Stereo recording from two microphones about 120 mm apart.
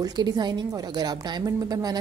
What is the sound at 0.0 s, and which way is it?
A woman's voice, 35° right (ahead or behind).